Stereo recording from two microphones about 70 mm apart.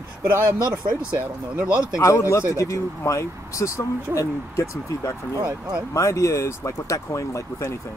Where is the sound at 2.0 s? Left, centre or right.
Left.